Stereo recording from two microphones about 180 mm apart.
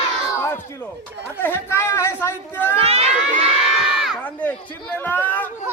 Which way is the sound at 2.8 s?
35° right (ahead or behind).